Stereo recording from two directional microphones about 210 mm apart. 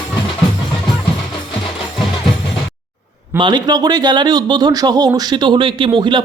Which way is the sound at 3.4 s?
20° right (ahead or behind).